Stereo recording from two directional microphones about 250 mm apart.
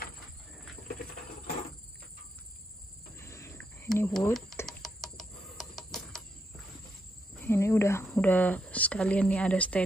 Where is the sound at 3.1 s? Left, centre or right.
Centre.